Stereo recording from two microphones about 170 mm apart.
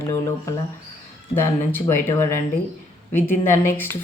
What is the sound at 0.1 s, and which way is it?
Speech, 15° left (ahead or behind).